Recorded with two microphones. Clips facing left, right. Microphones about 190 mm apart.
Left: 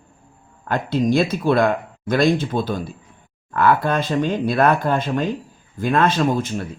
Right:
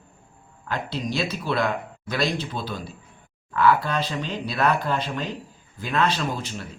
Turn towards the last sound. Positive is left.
turn(degrees=50)  # may be behind; listen again after turning